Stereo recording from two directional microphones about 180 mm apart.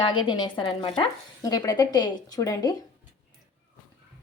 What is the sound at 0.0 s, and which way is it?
Speech, 25° left (ahead or behind).